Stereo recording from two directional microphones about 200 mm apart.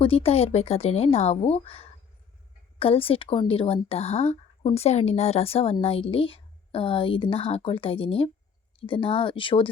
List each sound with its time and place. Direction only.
0.0 s a woman's voice: 30° left (ahead or behind)